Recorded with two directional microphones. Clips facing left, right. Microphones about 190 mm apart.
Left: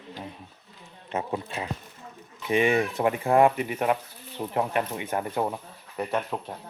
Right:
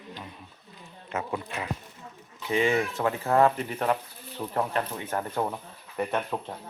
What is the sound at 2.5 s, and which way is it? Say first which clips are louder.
Speech: left 2 dB; 20° left (ahead or behind).